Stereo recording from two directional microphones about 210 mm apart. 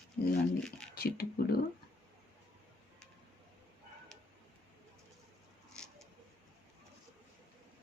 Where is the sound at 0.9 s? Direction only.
45° left (ahead or behind).